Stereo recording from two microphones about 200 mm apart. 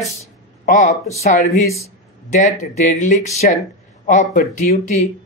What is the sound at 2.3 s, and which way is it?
Speech, 35° left (ahead or behind).